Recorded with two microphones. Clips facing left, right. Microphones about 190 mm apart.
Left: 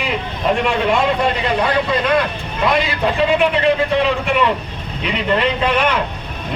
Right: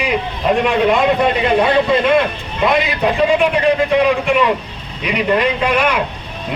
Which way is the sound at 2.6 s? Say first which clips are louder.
Right 2 dB; 20° right (ahead or behind).